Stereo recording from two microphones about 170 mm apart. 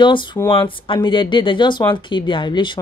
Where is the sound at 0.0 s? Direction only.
30° left (ahead or behind).